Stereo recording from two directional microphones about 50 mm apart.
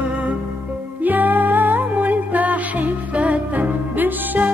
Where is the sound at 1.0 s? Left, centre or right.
Right.